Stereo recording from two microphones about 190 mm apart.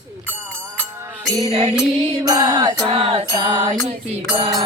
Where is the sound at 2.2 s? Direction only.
20° right (ahead or behind).